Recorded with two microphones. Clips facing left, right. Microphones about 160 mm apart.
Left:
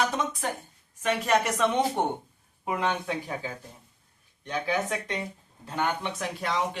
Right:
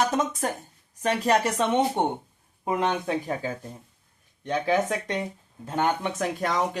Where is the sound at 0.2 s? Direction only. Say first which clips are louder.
Right 3 dB; 40° right (ahead or behind).